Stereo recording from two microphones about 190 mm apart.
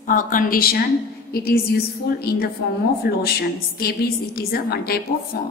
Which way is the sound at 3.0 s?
55° left (ahead or behind).